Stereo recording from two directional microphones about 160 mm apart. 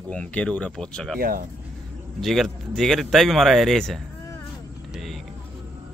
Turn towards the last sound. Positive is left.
turn(degrees=0)  # may be behind; listen again after turning